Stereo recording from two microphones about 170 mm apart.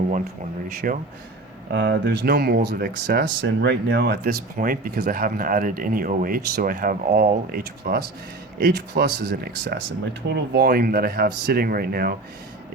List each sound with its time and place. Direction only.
0.8 s speech: 50° right (ahead or behind)
1.7 s speech: 80° right
4.2 s speech: 55° right (ahead or behind)
8.5 s speech: 80° right; by 12.1 s 60° right (ahead or behind)